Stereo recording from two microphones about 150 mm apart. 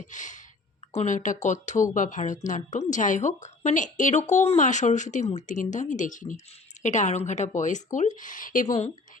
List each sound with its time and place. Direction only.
0.0 s a woman's voice: 55° left (ahead or behind)